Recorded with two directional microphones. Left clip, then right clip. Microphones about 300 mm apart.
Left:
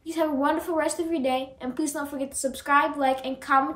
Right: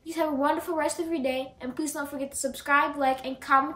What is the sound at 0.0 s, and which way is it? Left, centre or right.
A woman's voice, centre.